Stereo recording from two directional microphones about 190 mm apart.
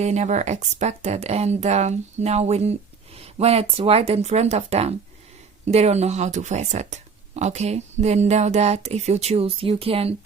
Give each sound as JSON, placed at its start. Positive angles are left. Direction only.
{"t": 0.0, "sound": "speech", "side_deg": -35}